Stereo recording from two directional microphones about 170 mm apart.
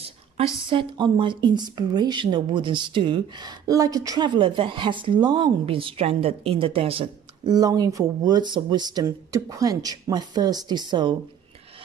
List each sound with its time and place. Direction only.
0.6 s speech: 30° right (ahead or behind)